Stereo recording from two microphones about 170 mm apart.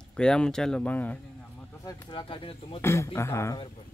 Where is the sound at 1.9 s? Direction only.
30° left (ahead or behind).